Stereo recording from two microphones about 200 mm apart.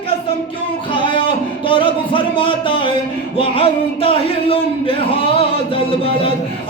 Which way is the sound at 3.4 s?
30° left (ahead or behind).